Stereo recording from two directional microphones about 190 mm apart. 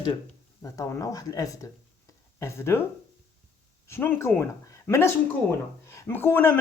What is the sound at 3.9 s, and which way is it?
Speech, 10° left (ahead or behind).